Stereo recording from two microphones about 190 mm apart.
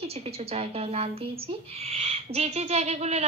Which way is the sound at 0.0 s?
30° right (ahead or behind).